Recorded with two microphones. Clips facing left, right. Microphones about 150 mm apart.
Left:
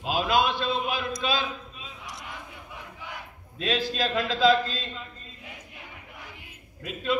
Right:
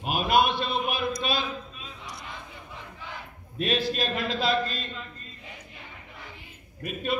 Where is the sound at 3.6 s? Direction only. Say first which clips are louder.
Even; 90° left.